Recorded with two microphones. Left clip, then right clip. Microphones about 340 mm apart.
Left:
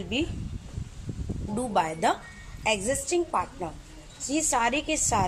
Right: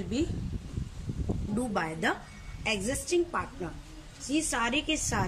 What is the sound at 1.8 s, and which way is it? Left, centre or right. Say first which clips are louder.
A woman's voice: left 7 dB; centre.